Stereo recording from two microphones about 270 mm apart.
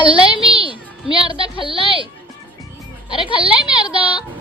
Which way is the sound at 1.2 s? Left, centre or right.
Centre.